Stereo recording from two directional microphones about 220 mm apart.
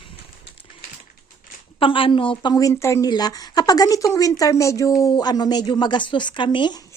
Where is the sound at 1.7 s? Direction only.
25° left (ahead or behind).